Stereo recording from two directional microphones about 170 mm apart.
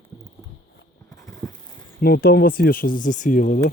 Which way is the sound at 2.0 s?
65° left (ahead or behind).